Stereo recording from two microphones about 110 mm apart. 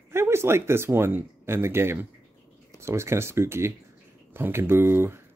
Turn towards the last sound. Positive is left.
turn(degrees=-20)  # may be behind; listen again after turning